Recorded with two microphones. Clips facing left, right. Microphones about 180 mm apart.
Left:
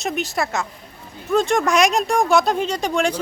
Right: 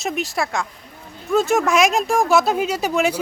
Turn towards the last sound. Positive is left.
turn(degrees=-5)  # may be behind; listen again after turning